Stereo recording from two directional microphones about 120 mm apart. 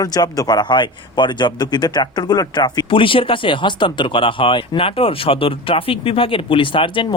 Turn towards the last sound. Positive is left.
turn(degrees=45)  # may be behind; listen again after turning